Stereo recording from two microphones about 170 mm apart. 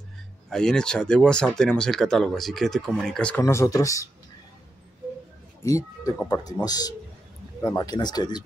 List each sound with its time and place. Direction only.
0.5 s speech: 5° left (ahead or behind)
5.6 s speech: 20° left (ahead or behind)